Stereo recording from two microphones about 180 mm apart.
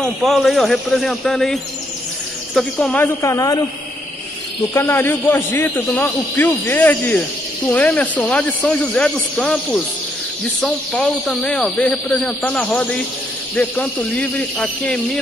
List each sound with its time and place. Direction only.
0.0 s a man's voice: centre (ahead or behind); by 3.6 s 20° left (ahead or behind)
4.7 s a man's voice: 10° left (ahead or behind)